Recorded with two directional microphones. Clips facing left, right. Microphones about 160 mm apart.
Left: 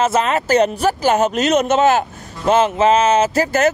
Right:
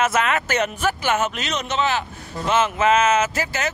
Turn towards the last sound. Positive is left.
turn(degrees=45)  # may be behind; listen again after turning